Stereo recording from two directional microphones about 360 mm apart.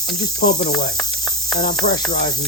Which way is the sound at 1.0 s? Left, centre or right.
Centre.